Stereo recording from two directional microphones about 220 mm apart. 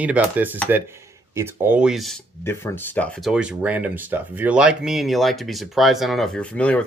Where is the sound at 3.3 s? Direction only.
5° right (ahead or behind).